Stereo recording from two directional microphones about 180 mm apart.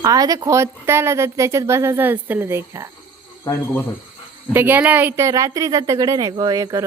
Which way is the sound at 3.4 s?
10° left (ahead or behind).